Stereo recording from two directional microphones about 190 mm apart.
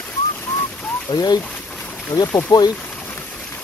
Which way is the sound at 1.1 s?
20° left (ahead or behind).